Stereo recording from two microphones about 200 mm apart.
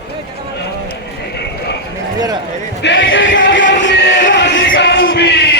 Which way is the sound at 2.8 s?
60° left (ahead or behind).